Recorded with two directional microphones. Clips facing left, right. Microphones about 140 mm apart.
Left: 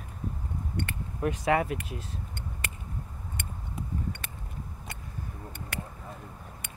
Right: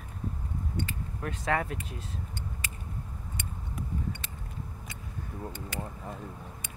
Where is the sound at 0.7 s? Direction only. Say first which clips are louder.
Left 1 dB; 65° left (ahead or behind).